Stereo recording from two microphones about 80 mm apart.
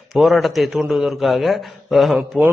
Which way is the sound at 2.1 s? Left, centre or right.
Centre.